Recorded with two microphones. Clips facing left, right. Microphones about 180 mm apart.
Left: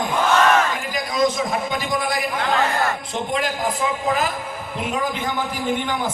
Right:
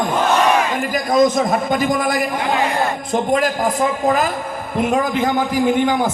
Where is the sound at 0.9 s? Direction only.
50° right (ahead or behind).